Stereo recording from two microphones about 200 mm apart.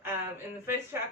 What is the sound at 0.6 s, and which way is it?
Speech, 10° right (ahead or behind).